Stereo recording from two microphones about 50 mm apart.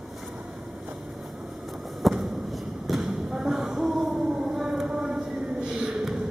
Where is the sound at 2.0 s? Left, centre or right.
Centre.